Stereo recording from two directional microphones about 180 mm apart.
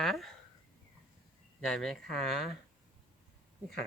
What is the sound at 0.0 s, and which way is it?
Speech, centre (ahead or behind).